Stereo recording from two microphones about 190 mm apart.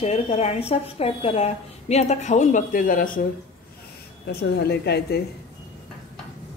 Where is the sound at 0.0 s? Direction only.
35° left (ahead or behind).